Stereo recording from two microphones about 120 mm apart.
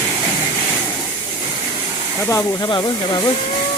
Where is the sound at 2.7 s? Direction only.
35° left (ahead or behind).